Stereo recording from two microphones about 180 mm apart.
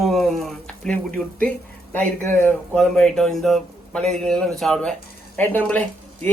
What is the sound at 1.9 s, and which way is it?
A man's voice, 10° left (ahead or behind).